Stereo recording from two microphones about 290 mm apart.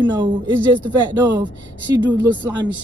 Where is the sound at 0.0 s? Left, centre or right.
Centre.